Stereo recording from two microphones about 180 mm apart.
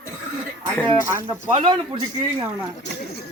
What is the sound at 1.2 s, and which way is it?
Speech, 25° right (ahead or behind).